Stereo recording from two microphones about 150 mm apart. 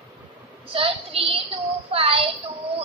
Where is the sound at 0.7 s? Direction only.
40° right (ahead or behind).